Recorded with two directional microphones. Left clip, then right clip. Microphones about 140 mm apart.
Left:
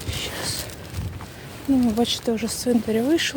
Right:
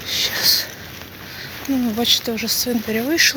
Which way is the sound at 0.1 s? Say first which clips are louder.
Right 12 dB; 30° left (ahead or behind).